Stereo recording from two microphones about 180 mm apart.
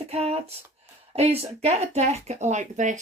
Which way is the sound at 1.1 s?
35° right (ahead or behind).